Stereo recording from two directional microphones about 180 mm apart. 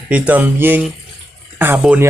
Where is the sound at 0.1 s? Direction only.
10° right (ahead or behind).